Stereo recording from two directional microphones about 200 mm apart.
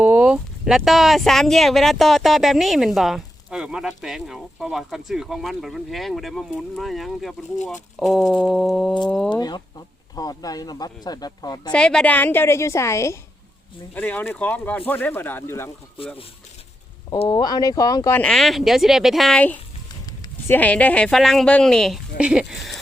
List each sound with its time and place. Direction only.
0.0 s speech: 10° right (ahead or behind)
9.3 s speech: 20° left (ahead or behind)
11.7 s speech: 5° left (ahead or behind)
17.1 s speech: 20° left (ahead or behind); by 22.8 s centre (ahead or behind)